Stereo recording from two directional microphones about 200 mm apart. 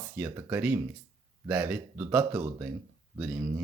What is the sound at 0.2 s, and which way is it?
Speech, 15° right (ahead or behind).